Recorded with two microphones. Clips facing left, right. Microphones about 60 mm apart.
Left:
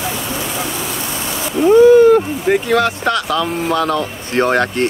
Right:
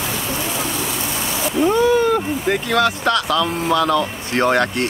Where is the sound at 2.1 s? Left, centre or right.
Centre.